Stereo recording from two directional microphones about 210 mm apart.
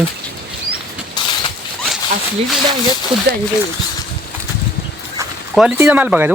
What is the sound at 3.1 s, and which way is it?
Speech, 25° right (ahead or behind).